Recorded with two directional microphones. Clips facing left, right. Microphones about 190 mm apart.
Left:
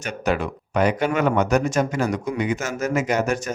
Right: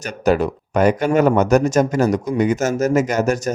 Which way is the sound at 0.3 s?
40° right (ahead or behind).